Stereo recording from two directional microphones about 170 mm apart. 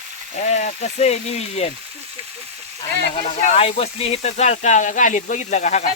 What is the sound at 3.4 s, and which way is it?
Speech, 35° left (ahead or behind).